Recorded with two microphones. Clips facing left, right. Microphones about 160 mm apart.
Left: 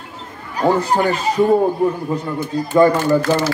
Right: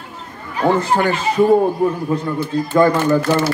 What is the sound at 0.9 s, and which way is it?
Speech, centre (ahead or behind).